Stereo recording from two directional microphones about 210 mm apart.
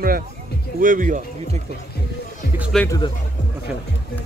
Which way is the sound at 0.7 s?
40° right (ahead or behind).